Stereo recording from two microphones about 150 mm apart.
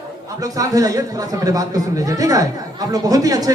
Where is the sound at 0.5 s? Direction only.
25° right (ahead or behind).